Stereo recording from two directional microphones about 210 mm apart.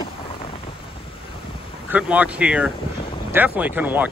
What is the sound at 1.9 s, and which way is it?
Speech, 5° right (ahead or behind).